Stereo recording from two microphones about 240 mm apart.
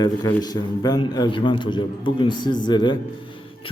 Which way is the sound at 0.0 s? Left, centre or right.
Centre.